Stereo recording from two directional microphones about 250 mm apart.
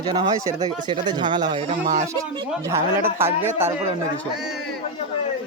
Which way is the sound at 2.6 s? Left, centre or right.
Centre.